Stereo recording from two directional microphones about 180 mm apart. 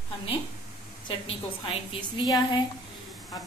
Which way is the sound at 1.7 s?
25° left (ahead or behind).